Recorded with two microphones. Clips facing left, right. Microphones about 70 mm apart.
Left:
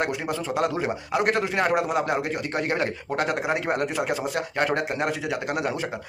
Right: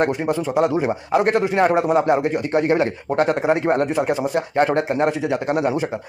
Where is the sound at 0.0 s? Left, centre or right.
Right.